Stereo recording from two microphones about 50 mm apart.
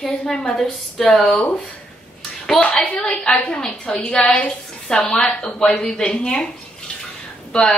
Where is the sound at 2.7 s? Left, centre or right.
Left.